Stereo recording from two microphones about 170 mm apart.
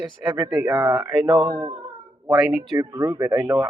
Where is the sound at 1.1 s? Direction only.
Centre (ahead or behind).